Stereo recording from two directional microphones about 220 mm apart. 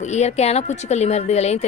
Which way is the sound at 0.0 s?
30° left (ahead or behind).